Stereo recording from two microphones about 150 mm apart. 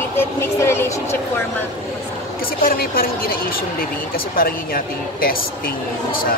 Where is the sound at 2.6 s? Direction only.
75° left (ahead or behind).